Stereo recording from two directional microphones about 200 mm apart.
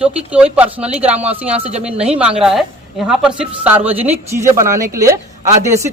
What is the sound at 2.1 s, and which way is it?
Speech, 5° right (ahead or behind).